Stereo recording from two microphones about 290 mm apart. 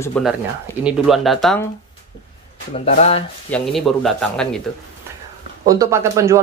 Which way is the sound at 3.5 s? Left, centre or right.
Centre.